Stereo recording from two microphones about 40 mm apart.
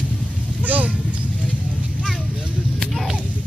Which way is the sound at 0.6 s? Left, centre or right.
Right.